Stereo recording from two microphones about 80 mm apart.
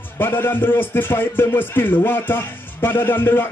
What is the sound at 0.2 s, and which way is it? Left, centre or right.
Music, left.